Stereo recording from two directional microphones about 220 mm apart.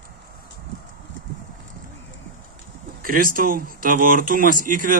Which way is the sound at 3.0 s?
40° right (ahead or behind).